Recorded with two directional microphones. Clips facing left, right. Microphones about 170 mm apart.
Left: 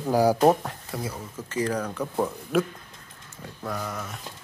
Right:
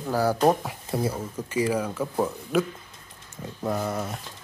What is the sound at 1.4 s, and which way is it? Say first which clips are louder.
Speech: right 1 dB; 10° right (ahead or behind).